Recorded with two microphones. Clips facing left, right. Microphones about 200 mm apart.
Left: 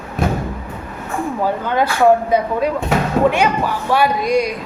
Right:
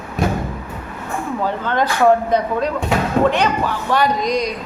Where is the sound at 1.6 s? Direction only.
10° left (ahead or behind).